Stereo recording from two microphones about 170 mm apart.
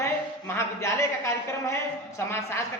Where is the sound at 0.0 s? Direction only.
15° left (ahead or behind).